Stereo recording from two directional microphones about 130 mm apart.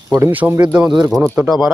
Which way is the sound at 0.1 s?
15° right (ahead or behind).